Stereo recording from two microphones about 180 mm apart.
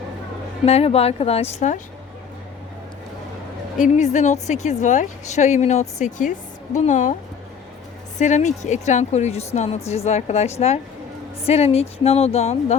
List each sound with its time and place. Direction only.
0.6 s a woman's voice: 35° left (ahead or behind)
3.8 s a woman's voice: 45° left (ahead or behind)
8.2 s a woman's voice: 40° left (ahead or behind)